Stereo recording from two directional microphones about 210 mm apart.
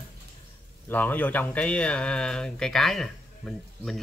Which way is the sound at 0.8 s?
10° left (ahead or behind).